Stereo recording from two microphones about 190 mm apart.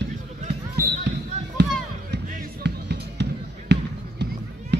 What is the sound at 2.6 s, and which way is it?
Music, 65° right (ahead or behind).